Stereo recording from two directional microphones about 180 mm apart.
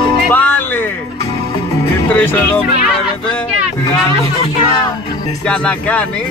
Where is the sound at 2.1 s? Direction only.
10° left (ahead or behind).